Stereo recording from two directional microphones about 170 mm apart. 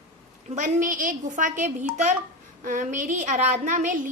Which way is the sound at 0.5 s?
50° right (ahead or behind).